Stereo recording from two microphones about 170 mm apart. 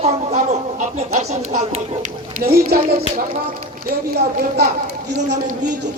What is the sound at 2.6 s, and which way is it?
Speech, 60° right (ahead or behind).